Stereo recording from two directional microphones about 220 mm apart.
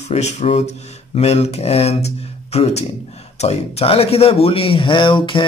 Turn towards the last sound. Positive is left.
turn(degrees=20)  # may be behind; listen again after turning